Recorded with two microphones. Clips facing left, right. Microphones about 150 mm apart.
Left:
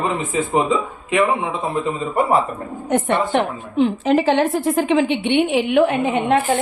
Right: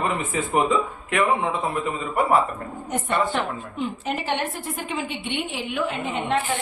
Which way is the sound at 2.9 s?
70° left (ahead or behind).